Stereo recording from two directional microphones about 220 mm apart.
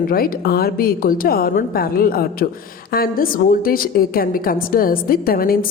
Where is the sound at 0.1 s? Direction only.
40° left (ahead or behind).